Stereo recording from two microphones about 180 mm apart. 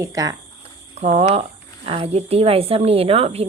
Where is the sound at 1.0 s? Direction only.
35° right (ahead or behind).